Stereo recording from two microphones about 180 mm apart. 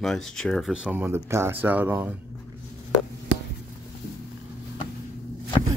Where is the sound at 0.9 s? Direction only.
15° right (ahead or behind).